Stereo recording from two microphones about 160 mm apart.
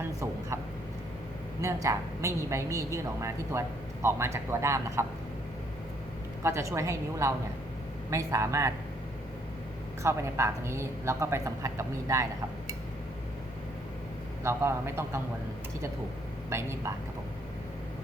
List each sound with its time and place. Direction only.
1.6 s a woman's voice: 20° right (ahead or behind)
6.4 s a woman's voice: 20° right (ahead or behind)
10.0 s a woman's voice: 15° right (ahead or behind)
14.4 s a woman's voice: 15° right (ahead or behind)
16.5 s a woman's voice: 15° right (ahead or behind)